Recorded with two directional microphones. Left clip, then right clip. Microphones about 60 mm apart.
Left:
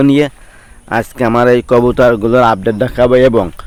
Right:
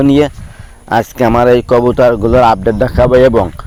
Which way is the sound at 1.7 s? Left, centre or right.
Centre.